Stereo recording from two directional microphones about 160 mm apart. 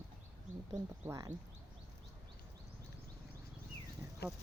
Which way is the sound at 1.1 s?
20° right (ahead or behind).